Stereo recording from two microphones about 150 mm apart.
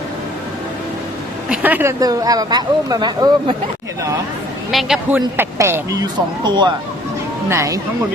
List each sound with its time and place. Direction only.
1.5 s speech: 10° right (ahead or behind); by 3.5 s 25° right (ahead or behind)
4.7 s a man's voice: centre (ahead or behind)
5.4 s speech: 15° right (ahead or behind)